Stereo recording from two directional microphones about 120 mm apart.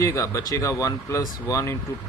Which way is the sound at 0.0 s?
25° left (ahead or behind).